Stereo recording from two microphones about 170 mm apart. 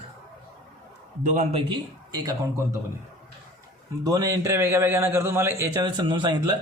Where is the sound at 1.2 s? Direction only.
45° right (ahead or behind).